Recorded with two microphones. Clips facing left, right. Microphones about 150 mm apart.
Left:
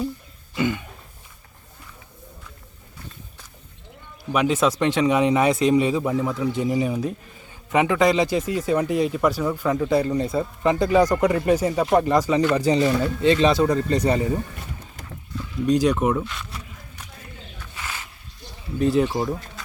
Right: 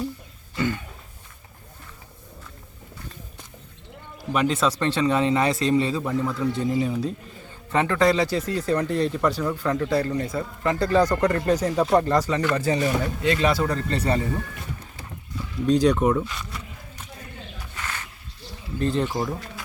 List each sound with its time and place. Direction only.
0.5 s a sound: 15° left (ahead or behind)
4.3 s speech: 5° left (ahead or behind)
12.8 s speech: 25° left (ahead or behind)
15.6 s speech: 10° left (ahead or behind)
17.7 s a sound: 10° left (ahead or behind)
18.8 s speech: 5° left (ahead or behind)